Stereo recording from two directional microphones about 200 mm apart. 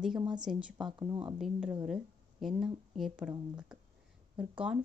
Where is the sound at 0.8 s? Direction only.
20° right (ahead or behind).